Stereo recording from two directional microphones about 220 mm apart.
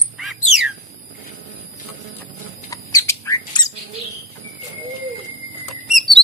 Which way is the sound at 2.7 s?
15° left (ahead or behind).